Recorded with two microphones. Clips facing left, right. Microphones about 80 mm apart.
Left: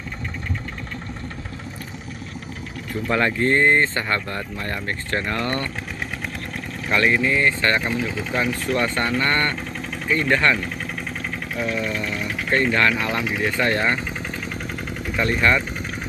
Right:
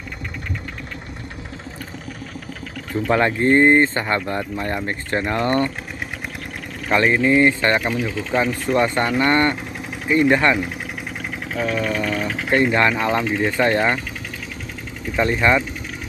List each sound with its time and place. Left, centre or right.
3.1 s speech: right
6.9 s speech: right
11.5 s speech: right
12.4 s speech: centre
15.1 s speech: right